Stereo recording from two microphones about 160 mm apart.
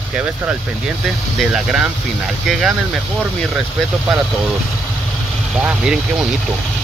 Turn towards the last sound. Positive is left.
turn(degrees=-5)  # may be behind; listen again after turning